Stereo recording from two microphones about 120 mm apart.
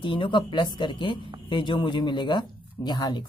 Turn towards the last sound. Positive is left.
turn(degrees=35)  # may be behind; listen again after turning